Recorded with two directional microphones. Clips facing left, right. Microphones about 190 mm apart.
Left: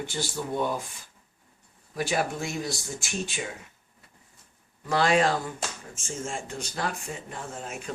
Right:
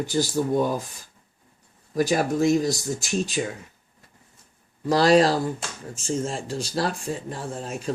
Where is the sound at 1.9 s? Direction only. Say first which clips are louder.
Right 6 dB; 40° right (ahead or behind).